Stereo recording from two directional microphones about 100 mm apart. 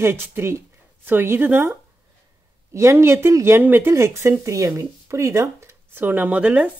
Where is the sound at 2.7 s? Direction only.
25° right (ahead or behind).